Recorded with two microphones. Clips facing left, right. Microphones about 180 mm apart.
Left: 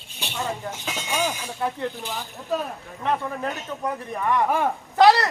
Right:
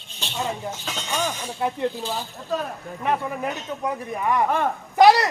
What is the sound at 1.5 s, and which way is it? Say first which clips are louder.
Speech: right 5 dB; 15° right (ahead or behind).